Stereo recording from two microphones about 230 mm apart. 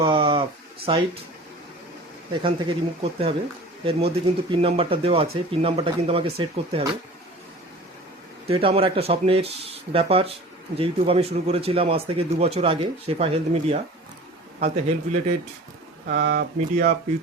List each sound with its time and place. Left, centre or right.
0.0 s a sound: right
0.9 s speech: right
2.4 s speech: right
4.6 s speech: right
8.4 s speech: right
16.0 s speech: right